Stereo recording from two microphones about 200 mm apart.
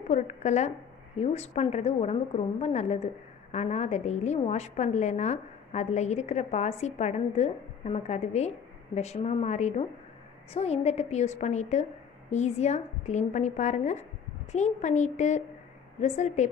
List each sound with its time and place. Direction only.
0.1 s a woman's voice: 35° left (ahead or behind)